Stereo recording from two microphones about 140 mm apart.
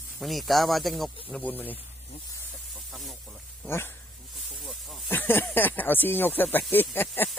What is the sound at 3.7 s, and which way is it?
Speech, 15° left (ahead or behind).